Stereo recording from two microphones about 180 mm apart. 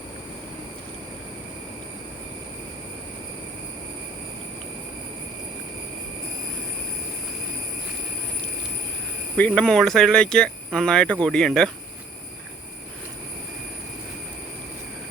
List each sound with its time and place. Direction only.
9.4 s speech: 5° left (ahead or behind)